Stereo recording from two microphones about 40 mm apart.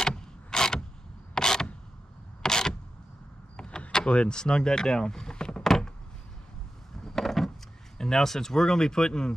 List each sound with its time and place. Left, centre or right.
0.0 s mechanisms: centre
1.3 s camera: centre
3.5 s power windows: left
3.9 s speech: left
7.0 s a sound: centre
8.0 s speech: centre